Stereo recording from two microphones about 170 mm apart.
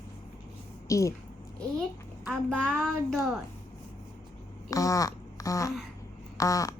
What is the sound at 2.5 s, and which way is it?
Speech, 5° left (ahead or behind).